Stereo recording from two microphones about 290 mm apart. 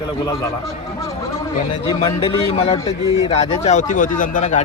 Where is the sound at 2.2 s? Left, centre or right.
Centre.